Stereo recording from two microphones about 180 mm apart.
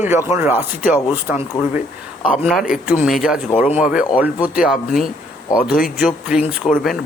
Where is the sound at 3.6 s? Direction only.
35° left (ahead or behind).